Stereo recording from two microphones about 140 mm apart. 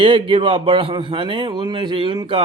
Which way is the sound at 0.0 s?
40° right (ahead or behind).